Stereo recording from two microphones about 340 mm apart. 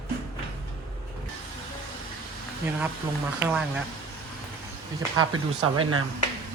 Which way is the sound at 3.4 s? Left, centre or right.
Centre.